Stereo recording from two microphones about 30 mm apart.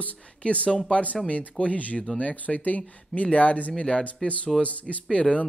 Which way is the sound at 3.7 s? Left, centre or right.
Left.